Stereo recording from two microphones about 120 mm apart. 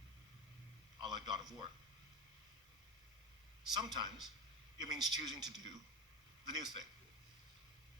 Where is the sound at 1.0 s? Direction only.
40° right (ahead or behind).